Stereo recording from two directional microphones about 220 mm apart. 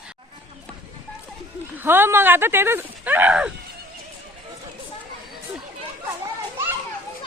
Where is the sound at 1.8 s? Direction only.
10° right (ahead or behind).